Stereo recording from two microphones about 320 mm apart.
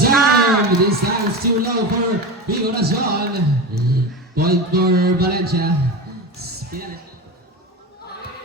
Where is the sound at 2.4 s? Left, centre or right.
Right.